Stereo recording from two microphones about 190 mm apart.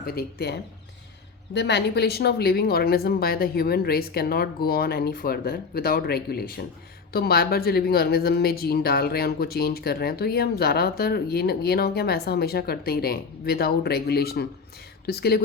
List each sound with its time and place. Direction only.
0.0 s speech: 50° left (ahead or behind)
1.5 s speech: 65° left (ahead or behind)